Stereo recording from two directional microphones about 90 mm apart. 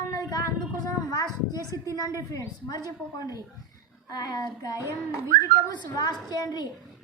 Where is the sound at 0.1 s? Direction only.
45° left (ahead or behind).